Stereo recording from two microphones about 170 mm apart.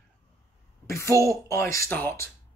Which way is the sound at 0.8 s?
15° left (ahead or behind).